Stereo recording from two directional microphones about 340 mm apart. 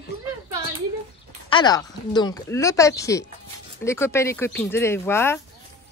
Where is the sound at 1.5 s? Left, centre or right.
Centre.